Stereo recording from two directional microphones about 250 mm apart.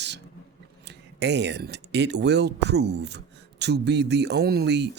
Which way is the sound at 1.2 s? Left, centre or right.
Right.